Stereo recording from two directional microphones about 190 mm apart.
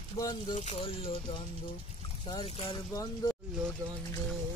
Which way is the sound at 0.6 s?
30° left (ahead or behind).